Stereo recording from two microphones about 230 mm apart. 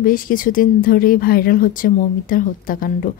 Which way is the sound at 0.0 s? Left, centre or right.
Left.